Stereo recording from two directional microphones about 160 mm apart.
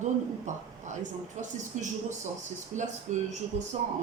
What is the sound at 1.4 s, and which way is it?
Speech, 50° right (ahead or behind).